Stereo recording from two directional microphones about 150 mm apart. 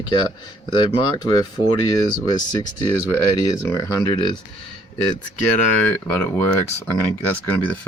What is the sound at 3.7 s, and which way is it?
Speech, 25° left (ahead or behind).